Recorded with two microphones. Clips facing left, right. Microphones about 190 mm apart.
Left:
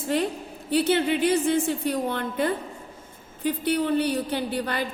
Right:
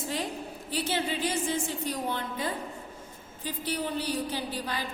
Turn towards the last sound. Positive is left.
turn(degrees=60)  # may be behind; listen again after turning